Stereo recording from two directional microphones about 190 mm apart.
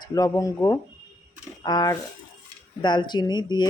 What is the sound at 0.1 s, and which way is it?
Speech, 20° left (ahead or behind).